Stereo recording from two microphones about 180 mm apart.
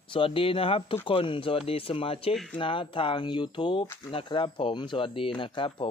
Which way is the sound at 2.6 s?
30° left (ahead or behind).